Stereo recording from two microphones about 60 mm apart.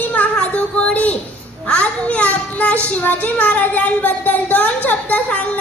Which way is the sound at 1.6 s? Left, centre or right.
Centre.